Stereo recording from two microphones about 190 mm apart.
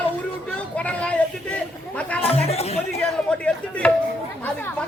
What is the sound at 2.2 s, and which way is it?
Speech, 30° left (ahead or behind).